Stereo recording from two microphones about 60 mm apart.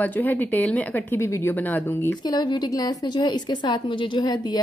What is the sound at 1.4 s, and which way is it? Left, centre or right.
Speech, left.